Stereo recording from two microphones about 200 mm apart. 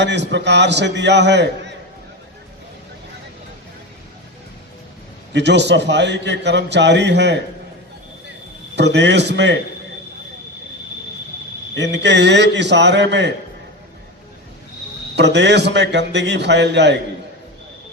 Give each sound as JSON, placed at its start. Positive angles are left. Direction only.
{"t": 0.0, "sound": "a man's voice", "side_deg": -60}
{"t": 5.3, "sound": "a man's voice", "side_deg": -60}
{"t": 8.7, "sound": "a man's voice", "side_deg": -60}
{"t": 11.7, "sound": "a man's voice", "side_deg": -60}
{"t": 15.1, "sound": "a man's voice", "side_deg": -60}